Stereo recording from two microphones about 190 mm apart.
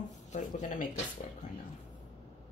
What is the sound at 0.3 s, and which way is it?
Speech, 40° left (ahead or behind).